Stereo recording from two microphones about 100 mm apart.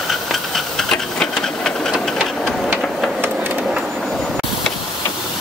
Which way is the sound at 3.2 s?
20° right (ahead or behind).